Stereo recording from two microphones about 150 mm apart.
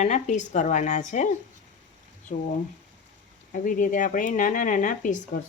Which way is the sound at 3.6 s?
60° left (ahead or behind).